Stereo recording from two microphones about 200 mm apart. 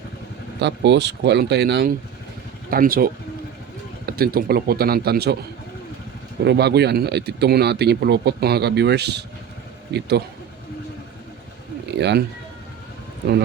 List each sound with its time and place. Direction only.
0.6 s a man's voice: 60° right (ahead or behind)
6.4 s speech: 55° right (ahead or behind)
11.9 s speech: 60° right (ahead or behind)